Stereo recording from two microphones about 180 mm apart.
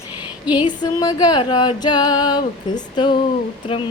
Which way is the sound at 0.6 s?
25° left (ahead or behind).